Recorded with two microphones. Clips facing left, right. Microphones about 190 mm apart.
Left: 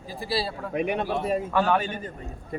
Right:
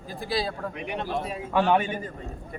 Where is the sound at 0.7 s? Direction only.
55° left (ahead or behind).